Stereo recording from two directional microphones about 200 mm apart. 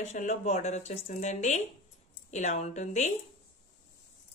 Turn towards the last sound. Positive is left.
turn(degrees=35)  # may be behind; listen again after turning